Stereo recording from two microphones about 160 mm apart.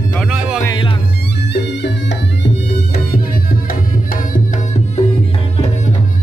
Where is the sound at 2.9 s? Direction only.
65° left (ahead or behind).